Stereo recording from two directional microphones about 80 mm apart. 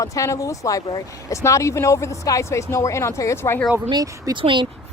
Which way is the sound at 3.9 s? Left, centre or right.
Right.